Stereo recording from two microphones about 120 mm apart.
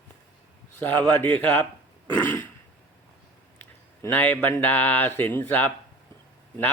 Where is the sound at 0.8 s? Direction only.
15° left (ahead or behind).